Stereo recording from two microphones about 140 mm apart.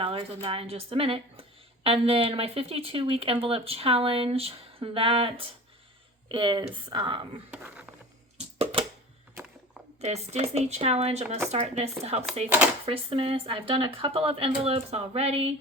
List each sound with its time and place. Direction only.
0.0 s speech: 40° right (ahead or behind)
7.5 s speech: 10° right (ahead or behind)
8.5 s a sound: 40° right (ahead or behind)
10.0 s speech: 50° right (ahead or behind)